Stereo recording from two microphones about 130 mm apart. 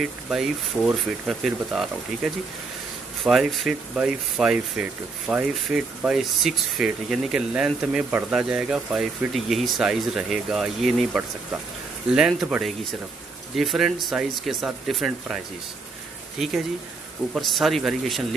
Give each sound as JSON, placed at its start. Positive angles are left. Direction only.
{"t": 0.8, "sound": "speech", "side_deg": 0}
{"t": 12.1, "sound": "speech", "side_deg": -5}